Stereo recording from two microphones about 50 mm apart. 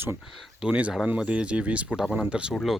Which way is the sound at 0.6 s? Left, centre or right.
Right.